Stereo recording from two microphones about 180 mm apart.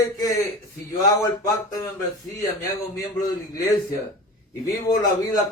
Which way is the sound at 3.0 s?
20° left (ahead or behind).